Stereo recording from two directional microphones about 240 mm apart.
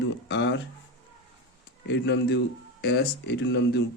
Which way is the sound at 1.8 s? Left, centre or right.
Left.